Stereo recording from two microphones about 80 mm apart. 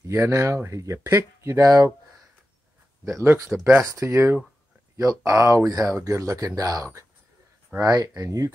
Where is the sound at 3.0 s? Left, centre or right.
Right.